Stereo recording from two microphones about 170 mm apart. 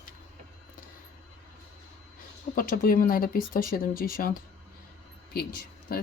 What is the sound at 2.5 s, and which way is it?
Speech, 55° left (ahead or behind).